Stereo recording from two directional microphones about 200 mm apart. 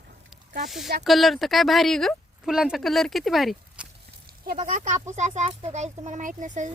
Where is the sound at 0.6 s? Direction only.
Centre (ahead or behind).